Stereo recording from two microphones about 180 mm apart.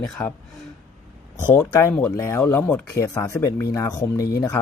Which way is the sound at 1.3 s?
15° left (ahead or behind).